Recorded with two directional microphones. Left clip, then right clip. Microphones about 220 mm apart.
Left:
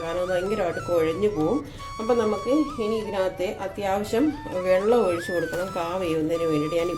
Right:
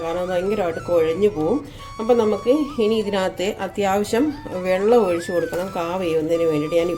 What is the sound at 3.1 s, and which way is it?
Speech, 45° right (ahead or behind).